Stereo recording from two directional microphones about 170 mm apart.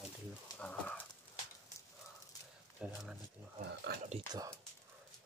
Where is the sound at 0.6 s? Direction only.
10° left (ahead or behind).